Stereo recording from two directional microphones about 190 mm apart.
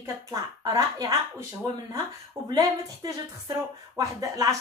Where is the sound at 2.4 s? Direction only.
20° right (ahead or behind).